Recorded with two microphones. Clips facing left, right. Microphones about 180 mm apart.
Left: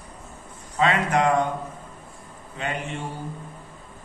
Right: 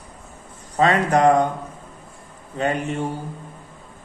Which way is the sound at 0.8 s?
40° right (ahead or behind).